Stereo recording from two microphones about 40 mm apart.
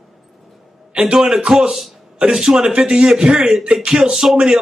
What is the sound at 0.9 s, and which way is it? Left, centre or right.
A man's voice, right.